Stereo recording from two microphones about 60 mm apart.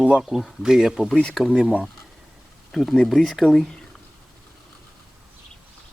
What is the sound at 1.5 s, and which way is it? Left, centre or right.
Speech, centre.